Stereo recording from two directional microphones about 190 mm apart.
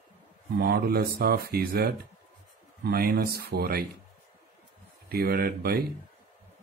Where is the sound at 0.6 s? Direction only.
55° right (ahead or behind).